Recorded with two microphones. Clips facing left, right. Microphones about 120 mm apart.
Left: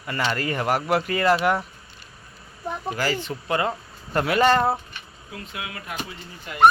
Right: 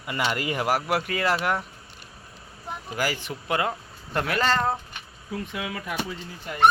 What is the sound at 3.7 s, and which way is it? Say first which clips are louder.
Speech: left 3 dB; 5° left (ahead or behind).